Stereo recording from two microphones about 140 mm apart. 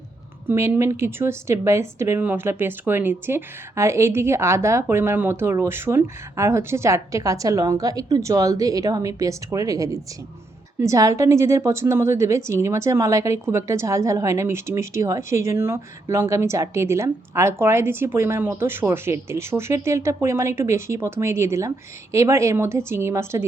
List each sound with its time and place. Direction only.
0.4 s a woman's voice: 20° right (ahead or behind)